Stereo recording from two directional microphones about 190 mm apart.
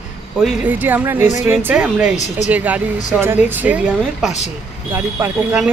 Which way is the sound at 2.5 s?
10° right (ahead or behind).